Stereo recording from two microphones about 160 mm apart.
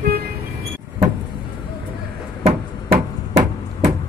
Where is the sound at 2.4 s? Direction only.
45° right (ahead or behind).